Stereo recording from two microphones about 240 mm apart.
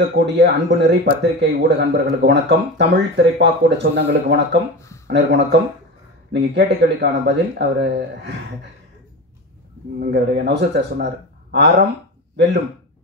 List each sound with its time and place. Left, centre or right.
0.1 s speech: right
9.9 s speech: right